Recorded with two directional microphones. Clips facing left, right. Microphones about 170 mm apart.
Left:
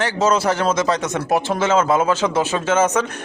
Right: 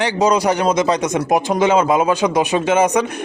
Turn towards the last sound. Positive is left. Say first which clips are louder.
# right 3 dB
turn(degrees=-15)  # may be behind; listen again after turning